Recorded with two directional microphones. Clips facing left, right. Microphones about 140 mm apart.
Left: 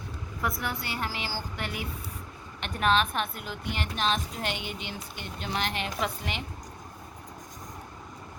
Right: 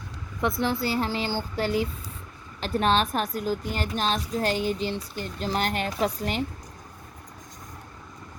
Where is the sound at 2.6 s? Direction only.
35° right (ahead or behind).